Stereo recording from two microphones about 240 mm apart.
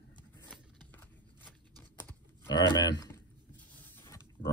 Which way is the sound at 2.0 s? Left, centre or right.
Centre.